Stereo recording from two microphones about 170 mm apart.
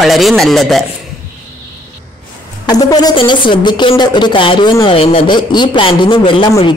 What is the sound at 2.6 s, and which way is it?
A woman's voice, 25° left (ahead or behind).